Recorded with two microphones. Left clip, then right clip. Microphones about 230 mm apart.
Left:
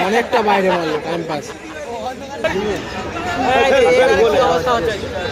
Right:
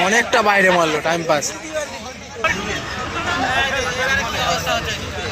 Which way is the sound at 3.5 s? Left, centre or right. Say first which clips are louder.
Left 8 dB; left.